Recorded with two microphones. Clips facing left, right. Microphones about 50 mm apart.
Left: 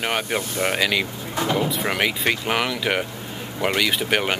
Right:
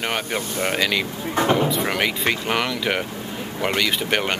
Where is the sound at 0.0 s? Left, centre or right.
Centre.